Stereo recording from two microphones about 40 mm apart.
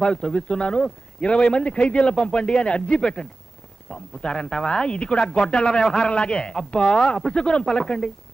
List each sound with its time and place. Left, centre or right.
0.0 s speech: centre